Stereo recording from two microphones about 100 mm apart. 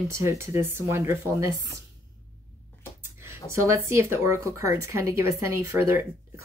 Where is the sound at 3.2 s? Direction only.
25° right (ahead or behind).